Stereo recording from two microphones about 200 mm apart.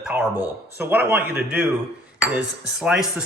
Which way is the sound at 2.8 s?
Centre (ahead or behind).